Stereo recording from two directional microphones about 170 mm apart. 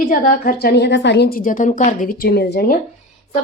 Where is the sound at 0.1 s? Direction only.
55° left (ahead or behind).